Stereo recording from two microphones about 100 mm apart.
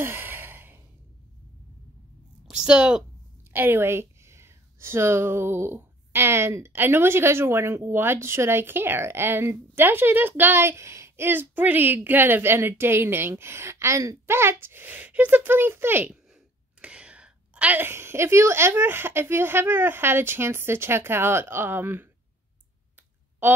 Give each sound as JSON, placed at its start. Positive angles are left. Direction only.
{"t": 0.0, "sound": "sigh", "side_deg": -20}
{"t": 2.4, "sound": "a sound", "side_deg": -10}
{"t": 3.5, "sound": "a woman's voice", "side_deg": -20}
{"t": 16.8, "sound": "a woman's voice", "side_deg": -10}